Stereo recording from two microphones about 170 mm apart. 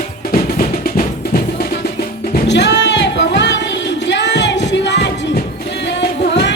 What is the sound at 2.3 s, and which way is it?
Music, 90° left.